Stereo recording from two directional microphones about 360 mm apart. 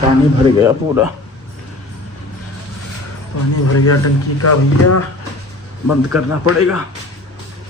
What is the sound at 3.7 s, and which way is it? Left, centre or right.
Speech, left.